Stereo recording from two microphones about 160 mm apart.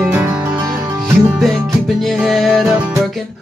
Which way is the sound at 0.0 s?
10° right (ahead or behind).